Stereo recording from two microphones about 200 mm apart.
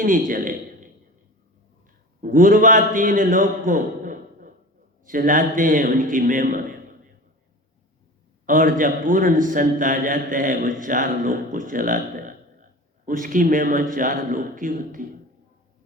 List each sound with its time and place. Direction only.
0.0 s a man's voice: 45° right (ahead or behind)
2.2 s a man's voice: 45° right (ahead or behind)
8.4 s a man's voice: 45° right (ahead or behind)
13.1 s a man's voice: 45° right (ahead or behind)